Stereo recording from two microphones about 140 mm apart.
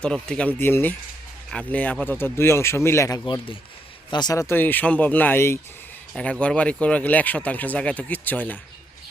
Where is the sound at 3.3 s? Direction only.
40° left (ahead or behind).